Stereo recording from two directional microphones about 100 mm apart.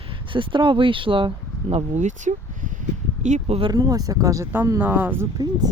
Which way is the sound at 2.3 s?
90° right.